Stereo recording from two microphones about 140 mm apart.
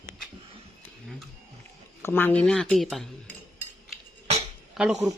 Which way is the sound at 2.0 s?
15° left (ahead or behind).